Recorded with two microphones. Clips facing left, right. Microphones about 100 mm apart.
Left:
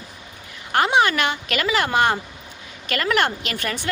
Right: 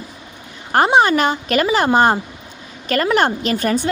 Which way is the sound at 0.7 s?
35° right (ahead or behind).